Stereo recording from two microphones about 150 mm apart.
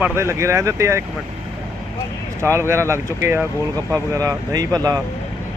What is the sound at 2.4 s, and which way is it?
Speech, 20° right (ahead or behind).